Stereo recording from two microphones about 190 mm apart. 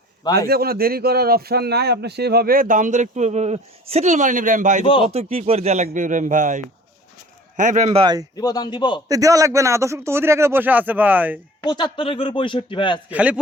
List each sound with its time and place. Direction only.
0.3 s a man's voice: 55° right (ahead or behind)
8.4 s speech: 20° left (ahead or behind)
9.0 s speech: 20° right (ahead or behind)
11.6 s speech: 25° left (ahead or behind)
13.1 s speech: 5° right (ahead or behind)